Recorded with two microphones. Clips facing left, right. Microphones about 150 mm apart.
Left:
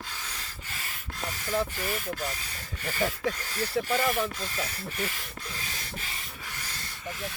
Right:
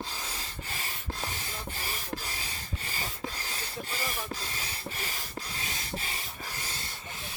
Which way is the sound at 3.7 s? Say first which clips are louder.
Left 12 dB; 70° left (ahead or behind).